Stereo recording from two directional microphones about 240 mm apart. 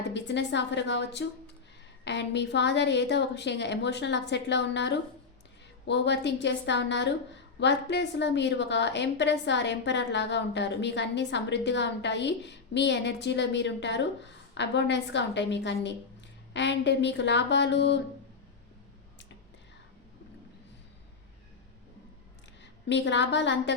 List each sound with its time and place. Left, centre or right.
0.1 s a woman's voice: left
22.9 s a woman's voice: left